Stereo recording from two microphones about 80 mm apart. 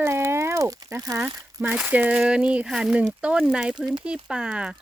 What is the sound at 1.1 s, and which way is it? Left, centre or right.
Speech, right.